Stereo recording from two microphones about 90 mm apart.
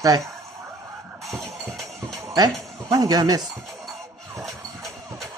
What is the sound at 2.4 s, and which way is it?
Speech, 40° right (ahead or behind).